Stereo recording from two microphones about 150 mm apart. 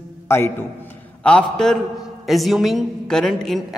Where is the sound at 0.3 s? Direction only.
15° left (ahead or behind).